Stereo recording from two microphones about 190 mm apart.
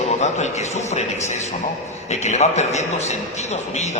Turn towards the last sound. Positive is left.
turn(degrees=35)  # may be behind; listen again after turning